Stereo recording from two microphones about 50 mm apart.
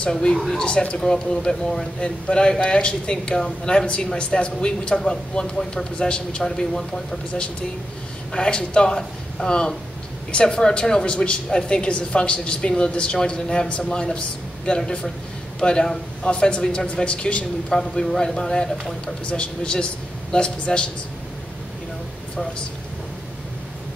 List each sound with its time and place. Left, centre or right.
0.0 s a woman's voice: centre
6.4 s a woman's voice: centre
8.3 s a woman's voice: centre